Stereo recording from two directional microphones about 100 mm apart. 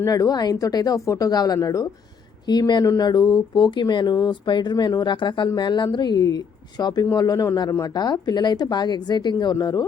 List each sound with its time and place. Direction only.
0.0 s speech: 35° left (ahead or behind)